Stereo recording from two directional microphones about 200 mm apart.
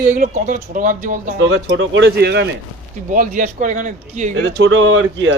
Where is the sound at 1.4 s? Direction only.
70° right (ahead or behind); by 2.5 s 55° right (ahead or behind).